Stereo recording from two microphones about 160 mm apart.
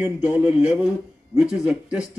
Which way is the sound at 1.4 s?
5° right (ahead or behind).